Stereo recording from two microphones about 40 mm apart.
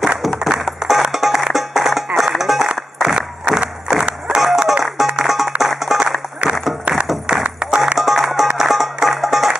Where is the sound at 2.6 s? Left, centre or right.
Centre.